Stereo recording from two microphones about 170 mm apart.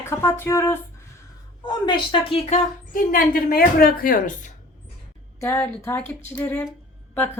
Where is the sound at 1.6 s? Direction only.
25° left (ahead or behind).